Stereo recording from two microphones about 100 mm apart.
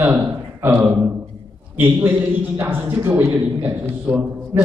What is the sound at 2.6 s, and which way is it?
A man's voice, 25° right (ahead or behind).